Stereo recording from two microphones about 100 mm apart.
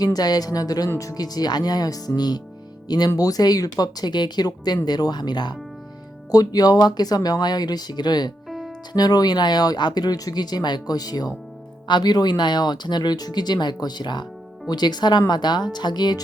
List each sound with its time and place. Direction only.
0.0 s speech: 40° left (ahead or behind)
8.4 s music: centre (ahead or behind)
8.9 s speech: 40° left (ahead or behind)